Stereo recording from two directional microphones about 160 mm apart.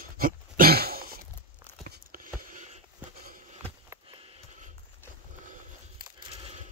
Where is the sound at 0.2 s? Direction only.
65° right (ahead or behind).